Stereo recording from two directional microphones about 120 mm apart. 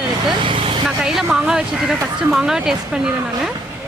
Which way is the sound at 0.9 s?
Centre (ahead or behind).